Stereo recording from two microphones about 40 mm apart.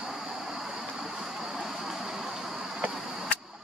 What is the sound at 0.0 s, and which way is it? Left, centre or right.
Vehicle, centre.